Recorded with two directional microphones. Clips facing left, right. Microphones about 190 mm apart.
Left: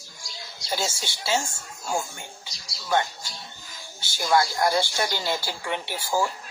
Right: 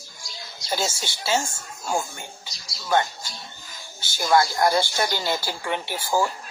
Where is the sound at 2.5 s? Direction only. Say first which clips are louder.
Right 2 dB; 45° right (ahead or behind).